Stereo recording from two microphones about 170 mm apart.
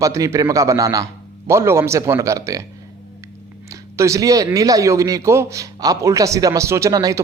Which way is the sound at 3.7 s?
15° right (ahead or behind).